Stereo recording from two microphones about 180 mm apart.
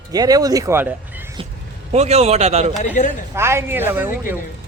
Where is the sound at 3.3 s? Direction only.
15° right (ahead or behind).